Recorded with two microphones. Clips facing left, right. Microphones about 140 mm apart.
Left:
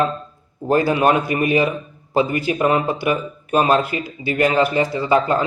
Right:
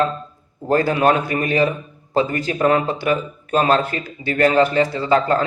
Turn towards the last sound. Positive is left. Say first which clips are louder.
# even
turn(degrees=15)  # may be behind; listen again after turning